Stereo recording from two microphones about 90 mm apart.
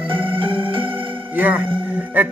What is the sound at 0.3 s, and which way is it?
Music, 75° right (ahead or behind).